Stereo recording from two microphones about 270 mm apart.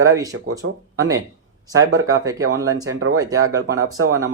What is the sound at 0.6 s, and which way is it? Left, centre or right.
Speech, right.